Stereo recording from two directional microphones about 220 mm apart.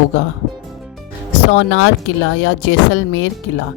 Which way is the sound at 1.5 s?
60° left (ahead or behind).